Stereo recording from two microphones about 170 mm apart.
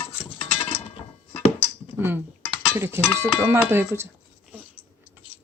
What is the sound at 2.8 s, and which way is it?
Speech, 15° right (ahead or behind).